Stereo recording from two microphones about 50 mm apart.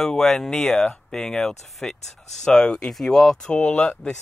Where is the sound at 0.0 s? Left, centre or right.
Centre.